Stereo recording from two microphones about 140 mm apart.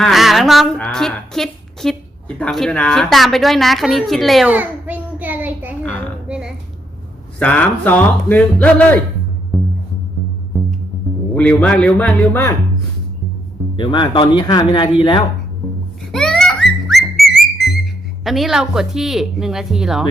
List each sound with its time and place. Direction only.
0.0 s a woman's voice: centre (ahead or behind)
4.4 s child singing: 10° right (ahead or behind)
6.2 s a sound: 5° right (ahead or behind)
7.3 s speech: 10° left (ahead or behind)
9.5 s music: centre (ahead or behind)
11.3 s speech: 10° left (ahead or behind)
13.7 s speech: 35° left (ahead or behind)
16.1 s music: 5° left (ahead or behind)
18.3 s a woman's voice: centre (ahead or behind)